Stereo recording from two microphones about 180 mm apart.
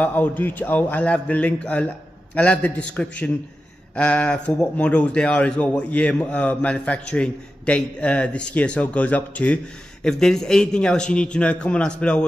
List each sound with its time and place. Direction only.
0.0 s a man's voice: 10° left (ahead or behind)